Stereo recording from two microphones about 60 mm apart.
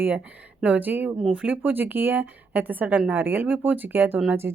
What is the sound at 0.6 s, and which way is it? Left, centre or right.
Speech, right.